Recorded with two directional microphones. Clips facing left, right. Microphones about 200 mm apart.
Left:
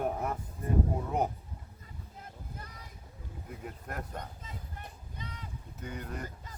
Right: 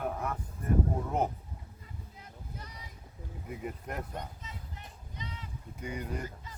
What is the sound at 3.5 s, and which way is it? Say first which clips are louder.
Speech: right 4 dB; 5° right (ahead or behind).